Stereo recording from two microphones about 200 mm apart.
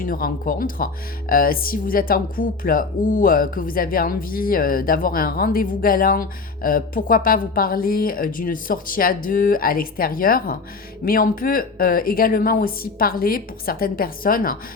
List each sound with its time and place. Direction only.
0.0 s a woman's voice: 45° left (ahead or behind)